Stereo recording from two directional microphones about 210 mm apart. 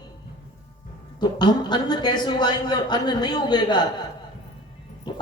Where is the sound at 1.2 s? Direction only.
20° left (ahead or behind).